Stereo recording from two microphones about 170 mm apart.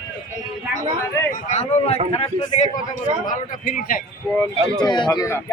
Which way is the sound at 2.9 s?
50° left (ahead or behind).